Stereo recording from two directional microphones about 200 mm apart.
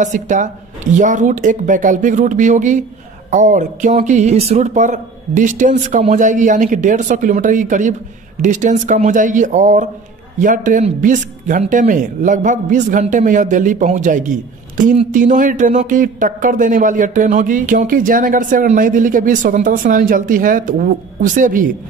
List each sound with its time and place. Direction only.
0.0 s speech: 40° right (ahead or behind)